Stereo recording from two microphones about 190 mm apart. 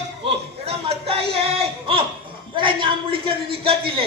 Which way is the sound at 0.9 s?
30° right (ahead or behind).